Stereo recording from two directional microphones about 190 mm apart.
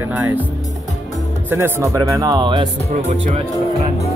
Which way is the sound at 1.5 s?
10° right (ahead or behind).